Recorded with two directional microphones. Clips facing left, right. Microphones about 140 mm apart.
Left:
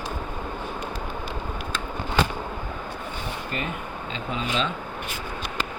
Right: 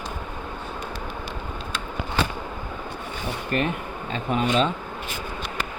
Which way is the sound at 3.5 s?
55° right (ahead or behind).